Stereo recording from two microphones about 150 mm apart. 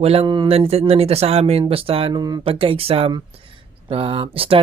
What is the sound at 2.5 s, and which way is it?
Speech, 35° right (ahead or behind).